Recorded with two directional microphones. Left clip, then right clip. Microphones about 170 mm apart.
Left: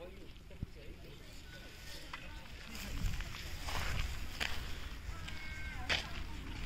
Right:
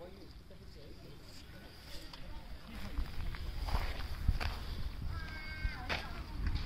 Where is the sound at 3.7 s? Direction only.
5° right (ahead or behind).